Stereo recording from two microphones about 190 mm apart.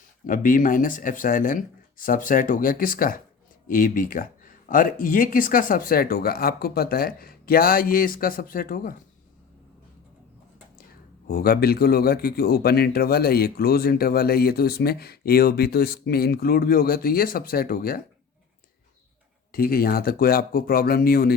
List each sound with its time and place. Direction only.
0.3 s speech: 45° left (ahead or behind)
11.3 s speech: 55° left (ahead or behind)
19.5 s speech: 50° left (ahead or behind)